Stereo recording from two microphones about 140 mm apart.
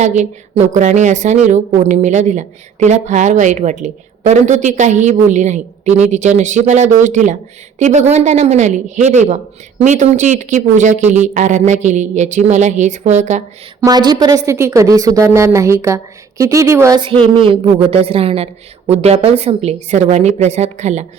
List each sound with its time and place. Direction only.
0.0 s a woman's voice: 55° right (ahead or behind)
13.8 s speech: 30° right (ahead or behind)
17.0 s a woman's voice: 40° right (ahead or behind); by 21.1 s 55° right (ahead or behind)